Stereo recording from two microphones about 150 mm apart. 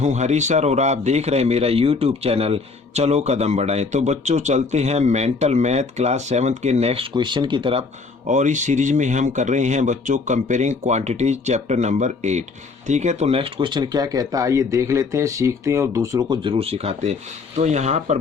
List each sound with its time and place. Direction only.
0.0 s a man's voice: 50° right (ahead or behind)
8.3 s a man's voice: 55° right (ahead or behind)